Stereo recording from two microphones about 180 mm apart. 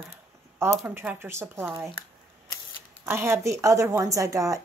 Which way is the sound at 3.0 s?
15° right (ahead or behind).